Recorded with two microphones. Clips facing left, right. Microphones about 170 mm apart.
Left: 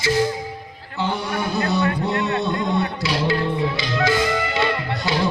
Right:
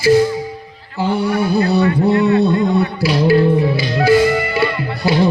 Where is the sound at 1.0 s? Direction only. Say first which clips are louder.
Right 7 dB; 30° right (ahead or behind).